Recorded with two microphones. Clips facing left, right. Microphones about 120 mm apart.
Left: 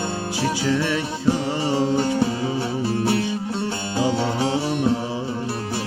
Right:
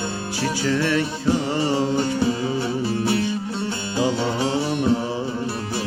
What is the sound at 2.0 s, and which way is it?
Music, 50° left (ahead or behind).